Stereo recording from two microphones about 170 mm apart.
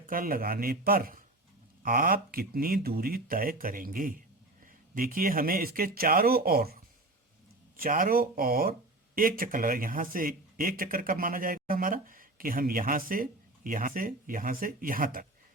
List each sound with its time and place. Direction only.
0.0 s speech: 55° right (ahead or behind)